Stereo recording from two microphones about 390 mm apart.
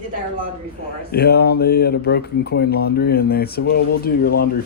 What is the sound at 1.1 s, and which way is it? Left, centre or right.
Speech, left.